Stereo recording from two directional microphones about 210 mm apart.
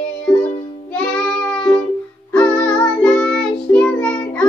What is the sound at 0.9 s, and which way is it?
Music, 5° left (ahead or behind).